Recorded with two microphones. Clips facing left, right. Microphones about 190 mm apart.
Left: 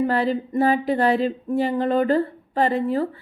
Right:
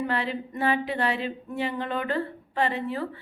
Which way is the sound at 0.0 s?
40° left (ahead or behind).